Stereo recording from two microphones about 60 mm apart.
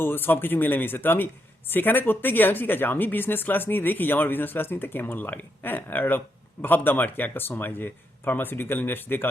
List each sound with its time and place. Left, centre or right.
0.0 s a man's voice: left